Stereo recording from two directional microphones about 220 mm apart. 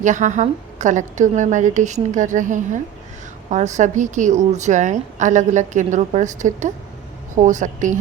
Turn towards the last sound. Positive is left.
turn(degrees=-35)  # may be behind; listen again after turning